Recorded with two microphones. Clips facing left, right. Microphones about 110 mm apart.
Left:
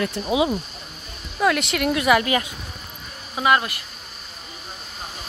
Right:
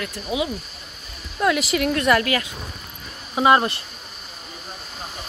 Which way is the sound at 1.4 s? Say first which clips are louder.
Even; centre (ahead or behind).